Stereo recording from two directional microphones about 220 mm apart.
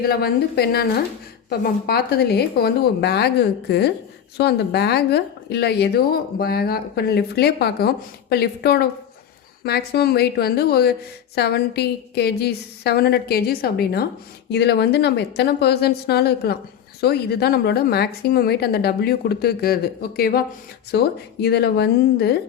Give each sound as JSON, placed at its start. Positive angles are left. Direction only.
{"t": 0.0, "sound": "a woman's voice", "side_deg": 45}